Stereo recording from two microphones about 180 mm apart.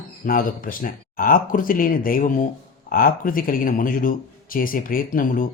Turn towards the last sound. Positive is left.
turn(degrees=50)  # may be behind; listen again after turning